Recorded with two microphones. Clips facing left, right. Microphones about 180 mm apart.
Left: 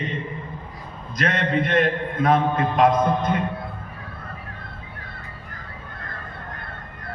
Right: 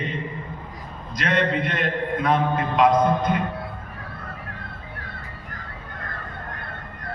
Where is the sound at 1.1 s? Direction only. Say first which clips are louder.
Even; 50° left (ahead or behind).